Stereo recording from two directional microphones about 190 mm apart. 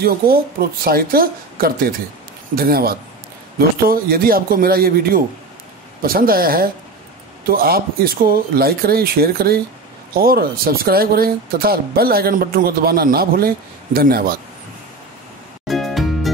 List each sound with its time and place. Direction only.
0.0 s speech: 55° right (ahead or behind)
15.7 s music: centre (ahead or behind)